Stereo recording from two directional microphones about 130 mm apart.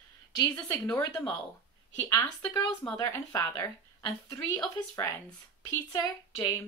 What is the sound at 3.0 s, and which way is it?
Speech, 25° left (ahead or behind).